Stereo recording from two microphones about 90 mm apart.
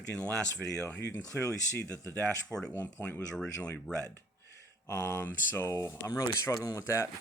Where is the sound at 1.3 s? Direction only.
30° left (ahead or behind).